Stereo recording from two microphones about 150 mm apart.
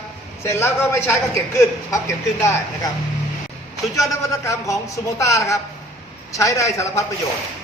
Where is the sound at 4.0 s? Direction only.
20° left (ahead or behind).